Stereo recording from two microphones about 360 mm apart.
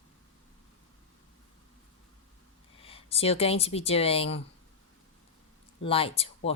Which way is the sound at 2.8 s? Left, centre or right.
Centre.